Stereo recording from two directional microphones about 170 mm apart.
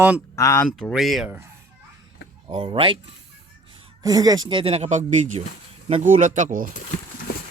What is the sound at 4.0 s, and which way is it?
Speech, 20° right (ahead or behind).